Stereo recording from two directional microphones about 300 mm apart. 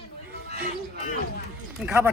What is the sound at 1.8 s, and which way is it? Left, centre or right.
Speech, centre.